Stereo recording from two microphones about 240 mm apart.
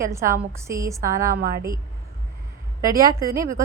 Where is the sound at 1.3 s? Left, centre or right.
Right.